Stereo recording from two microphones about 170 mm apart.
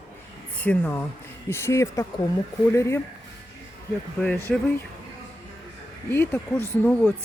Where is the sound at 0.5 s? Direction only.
10° left (ahead or behind).